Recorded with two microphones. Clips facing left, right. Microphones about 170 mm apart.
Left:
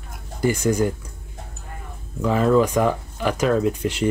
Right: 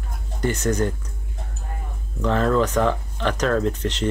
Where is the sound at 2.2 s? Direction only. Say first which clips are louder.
Left 2 dB; 10° left (ahead or behind).